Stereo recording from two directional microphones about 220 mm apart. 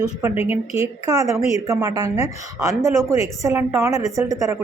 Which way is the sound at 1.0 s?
15° right (ahead or behind).